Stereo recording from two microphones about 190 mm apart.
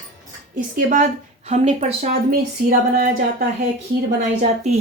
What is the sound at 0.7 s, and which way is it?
Speech, 40° right (ahead or behind).